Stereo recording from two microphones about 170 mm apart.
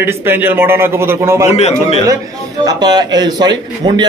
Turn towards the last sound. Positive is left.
turn(degrees=-25)  # may be behind; listen again after turning